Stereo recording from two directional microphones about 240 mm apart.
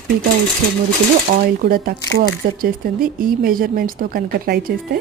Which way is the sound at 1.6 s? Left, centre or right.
Right.